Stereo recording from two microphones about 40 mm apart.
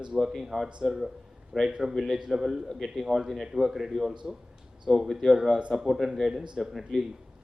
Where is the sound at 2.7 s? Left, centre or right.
Centre.